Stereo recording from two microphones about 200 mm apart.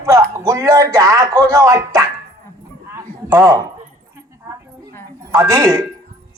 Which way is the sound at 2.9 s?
15° right (ahead or behind).